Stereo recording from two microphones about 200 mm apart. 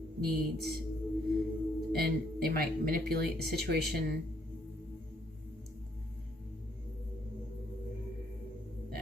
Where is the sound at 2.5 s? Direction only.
50° right (ahead or behind).